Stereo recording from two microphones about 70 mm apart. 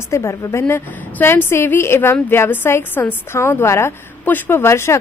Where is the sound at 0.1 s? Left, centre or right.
Left.